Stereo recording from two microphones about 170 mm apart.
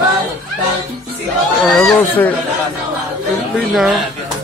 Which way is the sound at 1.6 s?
5° left (ahead or behind).